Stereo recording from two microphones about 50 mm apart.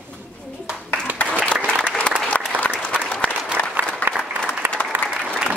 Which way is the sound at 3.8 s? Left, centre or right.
Right.